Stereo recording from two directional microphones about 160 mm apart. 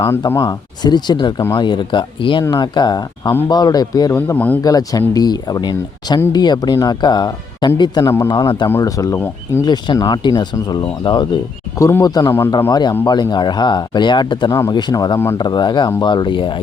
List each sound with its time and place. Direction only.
0.0 s speech: 15° left (ahead or behind)
4.6 s speech: 20° left (ahead or behind)
11.8 s speech: 20° left (ahead or behind)